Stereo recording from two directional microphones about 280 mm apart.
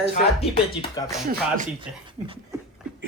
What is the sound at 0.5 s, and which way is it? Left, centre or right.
Speech, centre.